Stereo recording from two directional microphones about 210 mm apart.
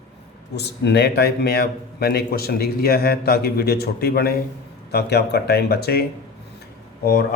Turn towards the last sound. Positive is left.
turn(degrees=45)  # may be behind; listen again after turning